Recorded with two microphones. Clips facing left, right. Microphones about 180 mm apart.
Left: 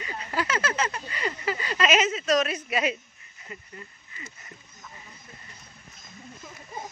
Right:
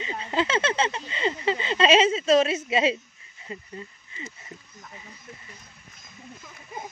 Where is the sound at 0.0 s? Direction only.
25° right (ahead or behind).